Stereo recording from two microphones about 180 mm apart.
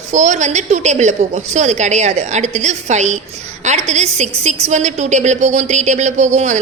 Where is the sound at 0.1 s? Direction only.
40° right (ahead or behind).